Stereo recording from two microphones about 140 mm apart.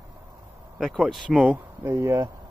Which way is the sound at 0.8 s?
Centre (ahead or behind).